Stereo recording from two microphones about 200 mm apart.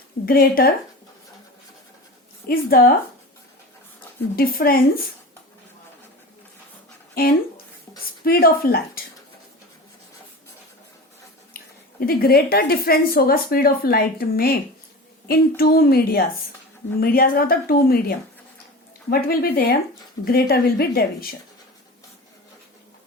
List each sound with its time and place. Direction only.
0.3 s a woman's voice: 45° left (ahead or behind)
2.5 s a woman's voice: 45° left (ahead or behind)
4.4 s a woman's voice: 45° left (ahead or behind)
7.1 s a woman's voice: 45° left (ahead or behind)
11.5 s a woman's voice: 50° left (ahead or behind)